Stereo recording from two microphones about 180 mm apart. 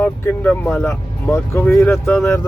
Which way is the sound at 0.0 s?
10° left (ahead or behind).